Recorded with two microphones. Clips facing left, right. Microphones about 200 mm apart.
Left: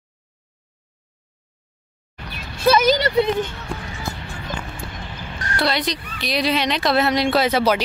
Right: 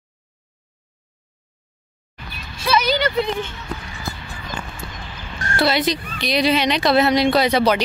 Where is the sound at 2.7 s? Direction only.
40° left (ahead or behind).